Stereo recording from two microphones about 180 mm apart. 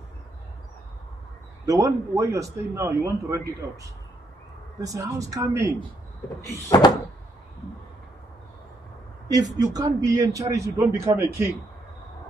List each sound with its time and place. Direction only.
1.7 s speech: 15° right (ahead or behind)
4.8 s speech: 15° right (ahead or behind)
6.7 s door: 20° left (ahead or behind)
9.3 s speech: 20° right (ahead or behind)